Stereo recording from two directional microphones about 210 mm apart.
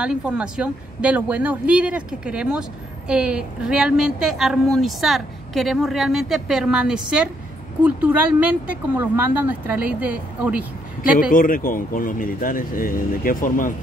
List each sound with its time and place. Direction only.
0.0 s a woman's voice: 5° right (ahead or behind)
11.0 s speech: 40° left (ahead or behind)